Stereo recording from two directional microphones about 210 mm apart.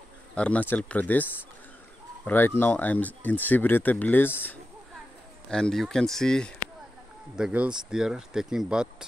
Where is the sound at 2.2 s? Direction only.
10° left (ahead or behind).